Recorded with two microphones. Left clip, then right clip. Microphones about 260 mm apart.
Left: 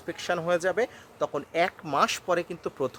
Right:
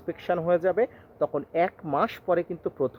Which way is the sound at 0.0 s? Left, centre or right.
Centre.